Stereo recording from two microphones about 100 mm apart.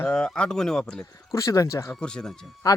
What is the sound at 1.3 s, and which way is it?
Speech, 35° left (ahead or behind).